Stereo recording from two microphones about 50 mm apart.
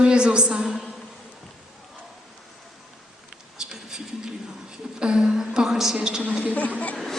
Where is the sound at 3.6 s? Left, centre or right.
Centre.